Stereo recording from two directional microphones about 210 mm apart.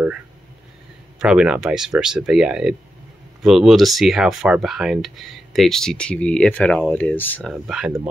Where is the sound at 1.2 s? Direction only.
5° right (ahead or behind).